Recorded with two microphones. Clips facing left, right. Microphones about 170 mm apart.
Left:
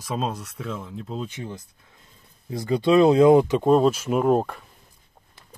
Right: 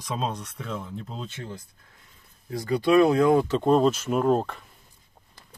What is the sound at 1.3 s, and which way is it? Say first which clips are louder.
Speech: left 3 dB; 15° left (ahead or behind).